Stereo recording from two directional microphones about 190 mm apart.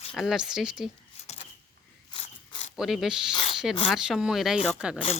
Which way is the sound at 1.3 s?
35° left (ahead or behind).